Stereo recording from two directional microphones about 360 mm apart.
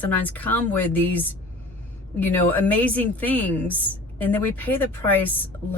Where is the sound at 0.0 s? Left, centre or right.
Centre.